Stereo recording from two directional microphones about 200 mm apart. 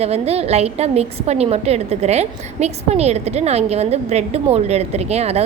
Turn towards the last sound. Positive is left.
turn(degrees=-30)  # may be behind; listen again after turning